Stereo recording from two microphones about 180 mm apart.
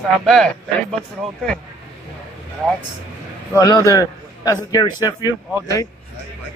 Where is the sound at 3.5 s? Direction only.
20° left (ahead or behind).